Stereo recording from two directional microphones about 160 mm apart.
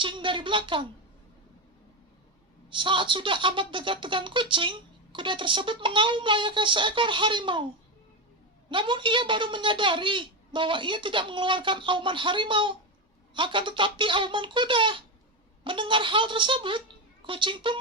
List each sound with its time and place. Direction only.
0.0 s speech: 30° right (ahead or behind)
2.6 s speech: 30° right (ahead or behind)
8.7 s speech: 30° right (ahead or behind)